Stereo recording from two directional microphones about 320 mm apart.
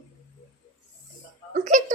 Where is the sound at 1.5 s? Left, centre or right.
Right.